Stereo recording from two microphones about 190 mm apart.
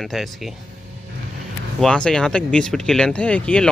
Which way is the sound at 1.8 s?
5° left (ahead or behind).